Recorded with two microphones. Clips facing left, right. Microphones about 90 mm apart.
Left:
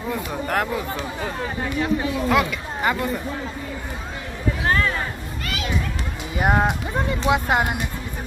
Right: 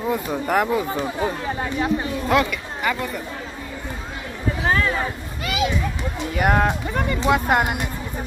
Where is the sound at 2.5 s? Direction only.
25° left (ahead or behind).